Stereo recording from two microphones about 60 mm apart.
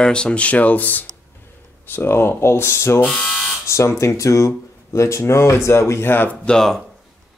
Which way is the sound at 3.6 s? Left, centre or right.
Left.